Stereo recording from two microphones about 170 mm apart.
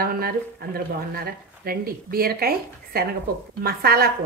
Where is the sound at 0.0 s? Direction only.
65° right (ahead or behind).